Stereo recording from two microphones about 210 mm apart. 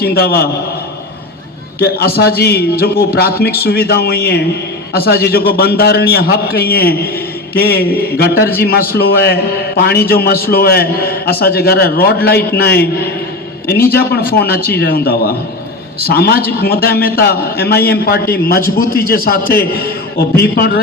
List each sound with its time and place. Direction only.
0.0 s a man's voice: 50° left (ahead or behind)
1.8 s a man's voice: 50° left (ahead or behind)